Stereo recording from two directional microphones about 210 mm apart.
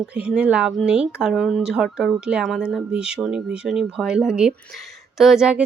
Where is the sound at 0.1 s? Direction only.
5° right (ahead or behind).